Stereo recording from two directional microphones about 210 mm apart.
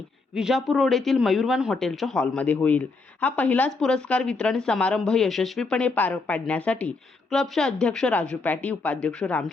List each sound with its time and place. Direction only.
0.3 s speech: centre (ahead or behind)